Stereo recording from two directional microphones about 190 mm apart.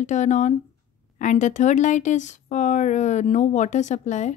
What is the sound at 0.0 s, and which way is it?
Speech, 40° left (ahead or behind).